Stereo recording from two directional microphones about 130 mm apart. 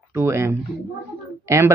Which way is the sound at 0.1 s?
20° right (ahead or behind).